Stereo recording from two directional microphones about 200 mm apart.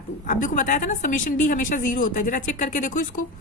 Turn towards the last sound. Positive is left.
turn(degrees=40)  # may be behind; listen again after turning